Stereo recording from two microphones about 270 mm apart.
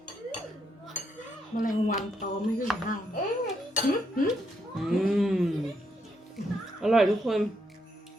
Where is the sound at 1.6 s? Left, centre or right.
Left.